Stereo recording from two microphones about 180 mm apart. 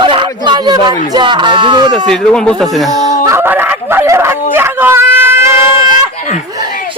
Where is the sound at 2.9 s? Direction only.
40° left (ahead or behind).